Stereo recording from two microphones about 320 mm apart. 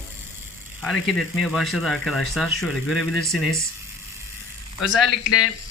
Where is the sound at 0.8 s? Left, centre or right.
Centre.